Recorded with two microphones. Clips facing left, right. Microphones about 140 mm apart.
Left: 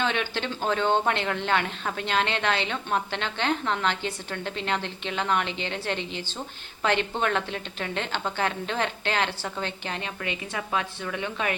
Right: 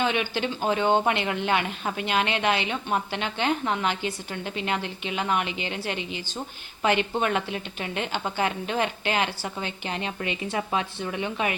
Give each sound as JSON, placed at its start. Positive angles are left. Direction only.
{"t": 0.0, "sound": "a woman's voice", "side_deg": -10}